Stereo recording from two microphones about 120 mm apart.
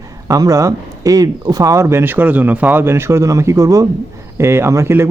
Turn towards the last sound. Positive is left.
turn(degrees=-20)  # may be behind; listen again after turning